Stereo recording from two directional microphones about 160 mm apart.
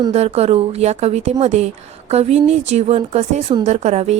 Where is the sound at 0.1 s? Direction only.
40° right (ahead or behind).